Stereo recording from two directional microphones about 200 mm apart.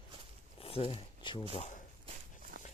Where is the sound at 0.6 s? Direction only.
30° left (ahead or behind).